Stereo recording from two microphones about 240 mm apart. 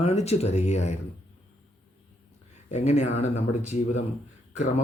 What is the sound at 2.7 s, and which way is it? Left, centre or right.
Speech, left.